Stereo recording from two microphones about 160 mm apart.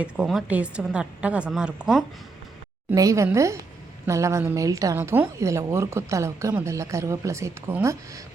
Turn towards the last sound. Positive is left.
turn(degrees=-15)  # may be behind; listen again after turning